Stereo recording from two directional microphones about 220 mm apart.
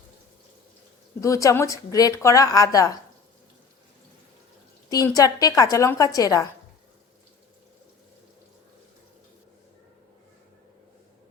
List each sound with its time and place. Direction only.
1.2 s speech: 15° left (ahead or behind)
4.9 s speech: 15° left (ahead or behind)